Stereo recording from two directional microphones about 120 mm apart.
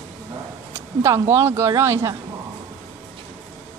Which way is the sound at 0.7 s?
20° right (ahead or behind).